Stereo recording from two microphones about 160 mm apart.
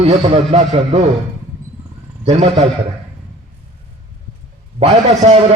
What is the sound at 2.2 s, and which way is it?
Speech, 40° right (ahead or behind).